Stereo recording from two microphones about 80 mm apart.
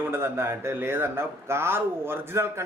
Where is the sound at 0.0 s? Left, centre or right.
Right.